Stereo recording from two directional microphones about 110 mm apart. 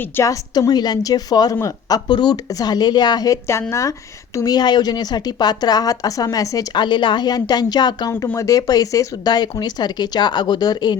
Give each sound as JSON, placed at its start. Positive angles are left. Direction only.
{"t": 0.2, "sound": "speech", "side_deg": 30}
{"t": 6.7, "sound": "speech", "side_deg": 45}
{"t": 8.3, "sound": "speech", "side_deg": 30}